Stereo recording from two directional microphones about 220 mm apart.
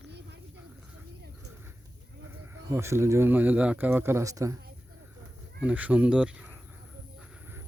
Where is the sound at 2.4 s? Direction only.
10° right (ahead or behind).